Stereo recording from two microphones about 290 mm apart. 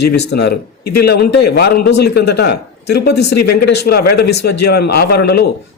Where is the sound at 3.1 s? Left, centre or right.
Left.